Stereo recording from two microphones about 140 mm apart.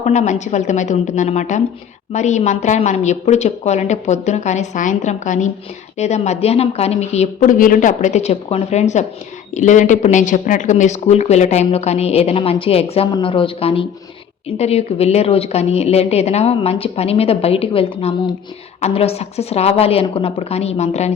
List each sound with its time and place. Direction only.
0.0 s a woman's voice: 55° left (ahead or behind)
7.5 s a woman's voice: 75° left (ahead or behind); by 21.1 s 50° left (ahead or behind)